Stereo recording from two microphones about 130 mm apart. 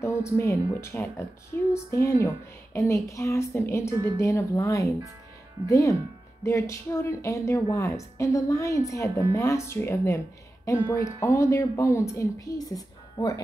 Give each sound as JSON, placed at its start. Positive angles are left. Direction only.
{"t": 0.0, "sound": "a woman's voice", "side_deg": 20}